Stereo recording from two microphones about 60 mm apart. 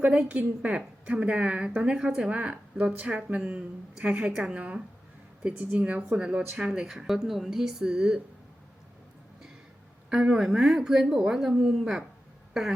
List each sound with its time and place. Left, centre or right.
0.0 s a woman's voice: right
10.1 s speech: centre